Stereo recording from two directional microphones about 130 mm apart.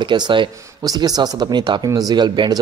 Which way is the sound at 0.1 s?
40° right (ahead or behind).